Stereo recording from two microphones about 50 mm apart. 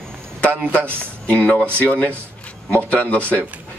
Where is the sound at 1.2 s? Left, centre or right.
Left.